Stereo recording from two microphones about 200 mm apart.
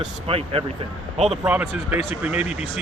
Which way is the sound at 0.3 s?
30° right (ahead or behind).